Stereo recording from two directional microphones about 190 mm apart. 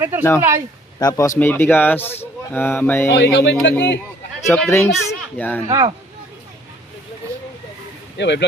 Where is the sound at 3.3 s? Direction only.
65° left (ahead or behind).